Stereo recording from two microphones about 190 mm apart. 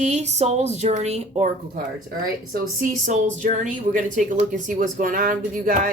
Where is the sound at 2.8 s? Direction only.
40° right (ahead or behind).